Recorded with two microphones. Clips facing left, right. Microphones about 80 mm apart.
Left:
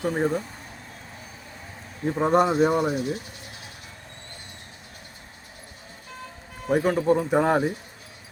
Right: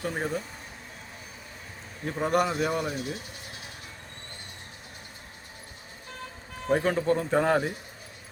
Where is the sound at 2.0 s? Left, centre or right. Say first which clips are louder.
Left 5 dB; left.